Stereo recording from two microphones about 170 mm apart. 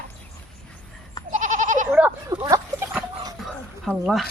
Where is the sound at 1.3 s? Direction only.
45° right (ahead or behind).